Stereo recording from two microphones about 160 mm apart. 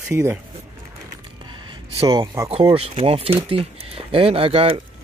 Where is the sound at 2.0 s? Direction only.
25° right (ahead or behind).